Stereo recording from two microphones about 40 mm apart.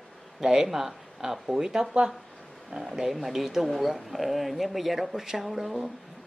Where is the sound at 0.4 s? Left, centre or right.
Centre.